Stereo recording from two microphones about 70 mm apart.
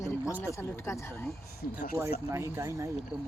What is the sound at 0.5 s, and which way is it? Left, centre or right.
Speech, left.